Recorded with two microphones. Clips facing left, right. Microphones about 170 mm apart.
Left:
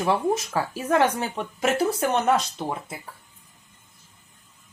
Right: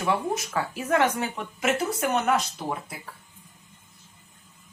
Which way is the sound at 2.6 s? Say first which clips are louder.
Left 2 dB; 20° left (ahead or behind).